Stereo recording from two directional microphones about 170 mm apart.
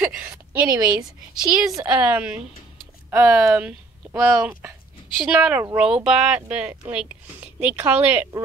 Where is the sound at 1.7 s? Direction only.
10° right (ahead or behind).